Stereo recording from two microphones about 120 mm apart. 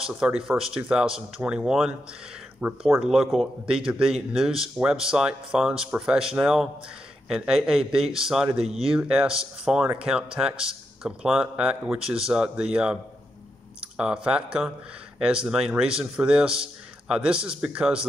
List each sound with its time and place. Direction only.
0.0 s a man's voice: 5° right (ahead or behind)
8.6 s speech: 55° right (ahead or behind)
8.9 s a man's voice: 10° right (ahead or behind)